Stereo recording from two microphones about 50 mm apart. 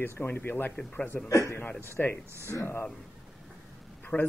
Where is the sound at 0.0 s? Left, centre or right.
Left.